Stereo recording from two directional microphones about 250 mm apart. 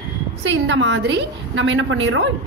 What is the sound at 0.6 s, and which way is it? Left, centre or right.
A woman's voice, right.